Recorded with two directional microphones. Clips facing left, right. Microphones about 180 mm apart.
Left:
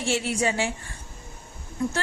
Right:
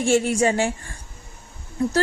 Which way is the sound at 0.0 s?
45° right (ahead or behind).